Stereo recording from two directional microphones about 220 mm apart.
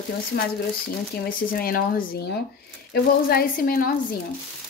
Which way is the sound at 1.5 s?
40° left (ahead or behind).